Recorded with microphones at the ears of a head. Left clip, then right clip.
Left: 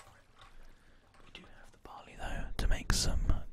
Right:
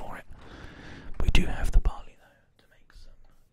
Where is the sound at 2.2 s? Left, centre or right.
Left.